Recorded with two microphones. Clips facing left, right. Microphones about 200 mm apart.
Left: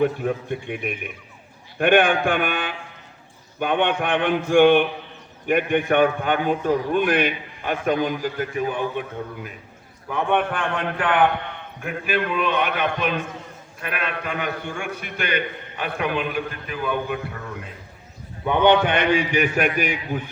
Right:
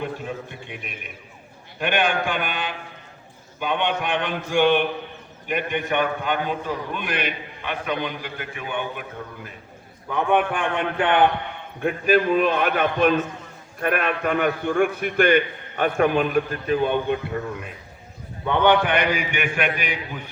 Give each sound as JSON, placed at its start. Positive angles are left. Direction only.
{"t": 0.0, "sound": "a man's voice", "side_deg": 55}
{"t": 10.1, "sound": "a man's voice", "side_deg": -5}
{"t": 10.9, "sound": "a man's voice", "side_deg": -25}
{"t": 11.8, "sound": "a man's voice", "side_deg": -40}
{"t": 18.4, "sound": "a man's voice", "side_deg": 15}